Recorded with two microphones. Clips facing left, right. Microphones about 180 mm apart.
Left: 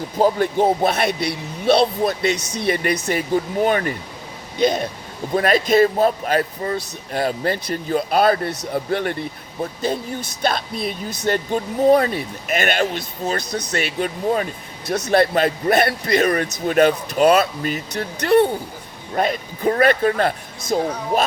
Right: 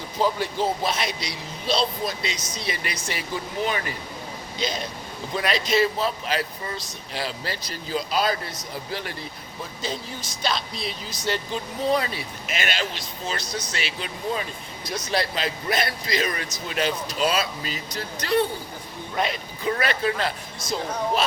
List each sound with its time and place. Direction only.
0.2 s a man's voice: 55° left (ahead or behind)
19.1 s speech: 45° left (ahead or behind)